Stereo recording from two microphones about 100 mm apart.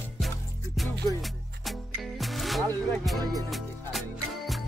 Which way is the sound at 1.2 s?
Centre (ahead or behind).